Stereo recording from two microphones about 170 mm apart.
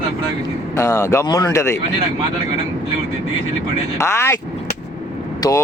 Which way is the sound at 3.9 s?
15° left (ahead or behind).